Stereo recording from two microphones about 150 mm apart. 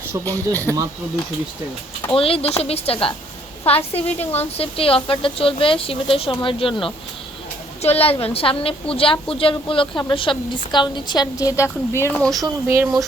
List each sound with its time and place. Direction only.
0.3 s speech: 15° left (ahead or behind)
2.0 s a woman's voice: 40° left (ahead or behind); by 12.2 s 15° left (ahead or behind)
12.2 s speech: centre (ahead or behind)
12.6 s speech: 15° right (ahead or behind)